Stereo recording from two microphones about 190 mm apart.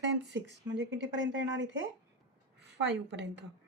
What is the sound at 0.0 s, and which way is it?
A woman's voice, 65° right (ahead or behind).